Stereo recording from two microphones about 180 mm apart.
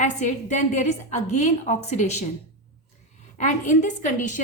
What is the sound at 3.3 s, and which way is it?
A woman's voice, 45° left (ahead or behind).